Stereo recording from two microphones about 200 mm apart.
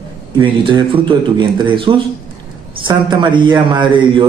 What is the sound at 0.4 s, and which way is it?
Speech, 25° right (ahead or behind).